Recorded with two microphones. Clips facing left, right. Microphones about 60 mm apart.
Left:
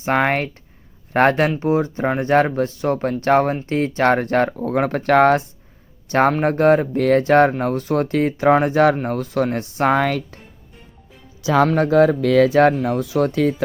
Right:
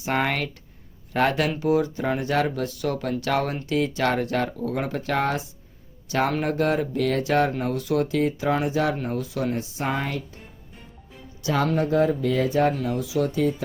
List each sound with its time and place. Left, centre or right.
0.0 s speech: left
11.6 s speech: left
12.8 s speech: left